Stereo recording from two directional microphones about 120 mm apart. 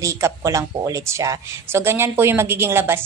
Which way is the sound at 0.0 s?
25° right (ahead or behind).